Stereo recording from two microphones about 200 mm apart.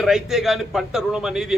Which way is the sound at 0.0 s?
Centre (ahead or behind).